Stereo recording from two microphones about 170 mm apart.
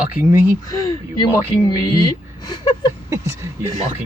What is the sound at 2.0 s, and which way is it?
Speech, 25° left (ahead or behind).